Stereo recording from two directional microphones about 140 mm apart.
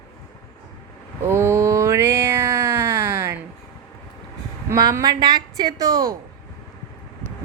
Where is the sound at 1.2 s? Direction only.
15° right (ahead or behind).